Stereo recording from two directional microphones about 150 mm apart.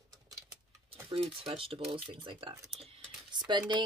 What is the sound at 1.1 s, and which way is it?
Speech, 35° right (ahead or behind).